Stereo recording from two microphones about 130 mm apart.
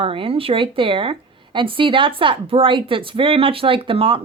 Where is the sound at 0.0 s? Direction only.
45° right (ahead or behind).